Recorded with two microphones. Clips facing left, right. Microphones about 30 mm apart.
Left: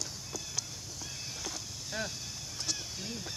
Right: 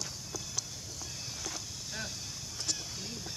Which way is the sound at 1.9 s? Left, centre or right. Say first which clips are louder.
Left 4 dB; centre.